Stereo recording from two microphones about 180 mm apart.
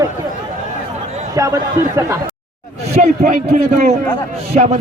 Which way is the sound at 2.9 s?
40° right (ahead or behind).